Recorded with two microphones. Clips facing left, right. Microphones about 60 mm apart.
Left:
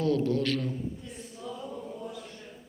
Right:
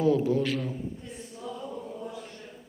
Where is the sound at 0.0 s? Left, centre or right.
Centre.